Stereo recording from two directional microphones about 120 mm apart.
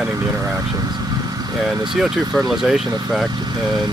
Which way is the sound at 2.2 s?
35° right (ahead or behind).